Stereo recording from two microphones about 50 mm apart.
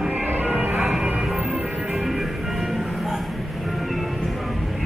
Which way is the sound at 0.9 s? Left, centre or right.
Centre.